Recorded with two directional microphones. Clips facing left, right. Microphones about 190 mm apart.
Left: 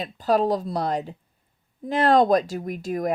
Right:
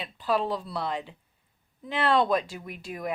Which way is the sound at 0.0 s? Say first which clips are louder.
Left 6 dB; 40° left (ahead or behind).